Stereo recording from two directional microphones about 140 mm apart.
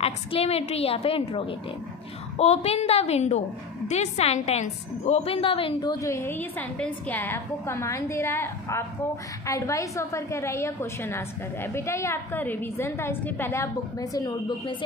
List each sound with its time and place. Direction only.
0.0 s a woman's voice: 45° left (ahead or behind); by 14.8 s 30° left (ahead or behind)